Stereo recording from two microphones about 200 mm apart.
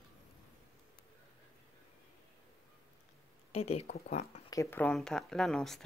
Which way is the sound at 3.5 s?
30° left (ahead or behind).